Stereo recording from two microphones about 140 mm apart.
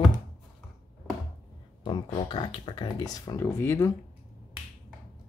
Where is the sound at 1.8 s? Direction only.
35° left (ahead or behind).